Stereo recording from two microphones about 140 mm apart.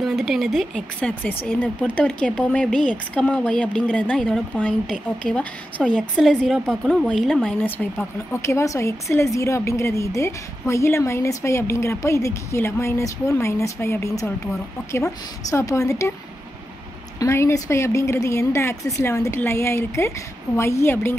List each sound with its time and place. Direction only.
0.0 s a woman's voice: centre (ahead or behind); by 14.3 s 20° left (ahead or behind)
15.5 s a woman's voice: 20° left (ahead or behind)
17.2 s a woman's voice: 20° left (ahead or behind)